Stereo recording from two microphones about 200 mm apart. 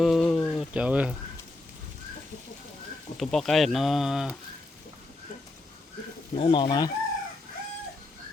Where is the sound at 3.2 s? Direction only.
Centre (ahead or behind).